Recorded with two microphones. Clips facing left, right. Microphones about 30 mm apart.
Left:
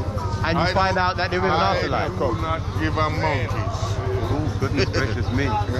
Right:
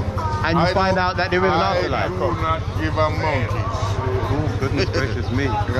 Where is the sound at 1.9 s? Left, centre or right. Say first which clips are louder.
Right 2 dB; centre.